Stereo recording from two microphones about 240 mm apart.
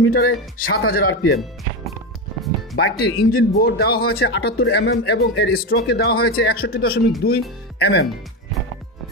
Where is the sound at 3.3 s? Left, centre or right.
Left.